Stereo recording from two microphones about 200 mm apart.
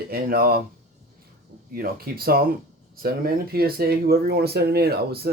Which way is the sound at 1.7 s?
50° right (ahead or behind).